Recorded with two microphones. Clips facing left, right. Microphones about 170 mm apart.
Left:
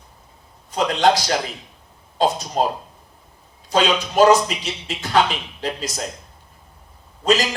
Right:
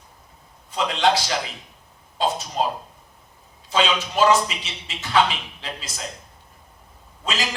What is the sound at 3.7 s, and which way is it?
A man's voice, 40° left (ahead or behind).